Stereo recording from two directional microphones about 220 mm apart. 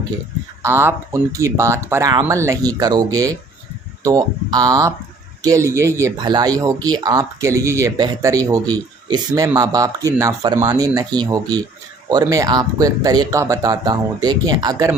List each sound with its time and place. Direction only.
0.6 s speech: 10° right (ahead or behind)